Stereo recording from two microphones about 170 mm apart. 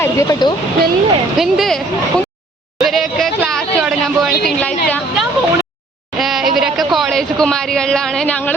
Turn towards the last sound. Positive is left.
turn(degrees=5)  # may be behind; listen again after turning